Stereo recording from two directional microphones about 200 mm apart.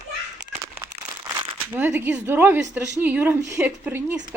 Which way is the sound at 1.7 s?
10° right (ahead or behind).